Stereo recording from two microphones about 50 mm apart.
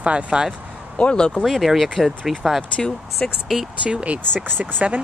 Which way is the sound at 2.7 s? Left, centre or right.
Centre.